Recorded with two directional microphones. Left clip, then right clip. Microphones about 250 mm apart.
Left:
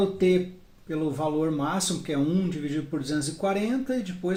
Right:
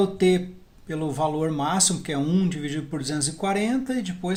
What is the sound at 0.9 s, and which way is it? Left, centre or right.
Speech, right.